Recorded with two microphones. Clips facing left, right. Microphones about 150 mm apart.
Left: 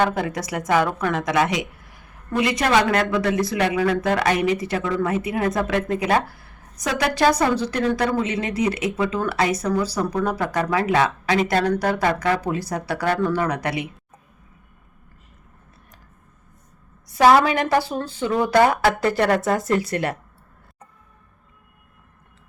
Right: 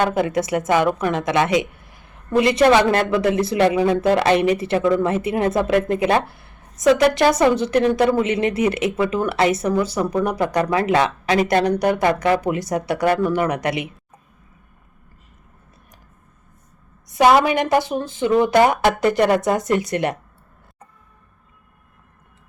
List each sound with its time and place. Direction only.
0.0 s a woman's voice: 25° right (ahead or behind)
17.1 s a woman's voice: 20° right (ahead or behind)